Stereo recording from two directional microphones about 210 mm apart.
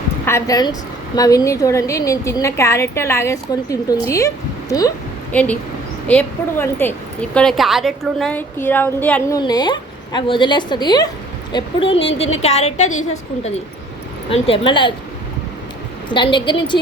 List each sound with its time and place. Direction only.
0.3 s a woman's voice: 15° left (ahead or behind)
5.3 s a woman's voice: 5° left (ahead or behind)
9.4 s a woman's voice: 20° left (ahead or behind)
16.0 s a woman's voice: 20° left (ahead or behind)